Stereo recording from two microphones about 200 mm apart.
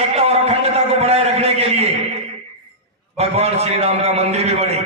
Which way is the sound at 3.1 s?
30° right (ahead or behind).